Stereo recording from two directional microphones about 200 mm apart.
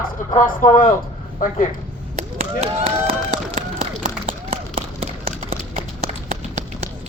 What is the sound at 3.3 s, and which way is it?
Run, 40° right (ahead or behind).